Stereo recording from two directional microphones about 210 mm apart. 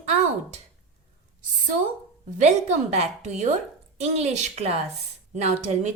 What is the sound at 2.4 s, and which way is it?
A woman's voice, 35° right (ahead or behind).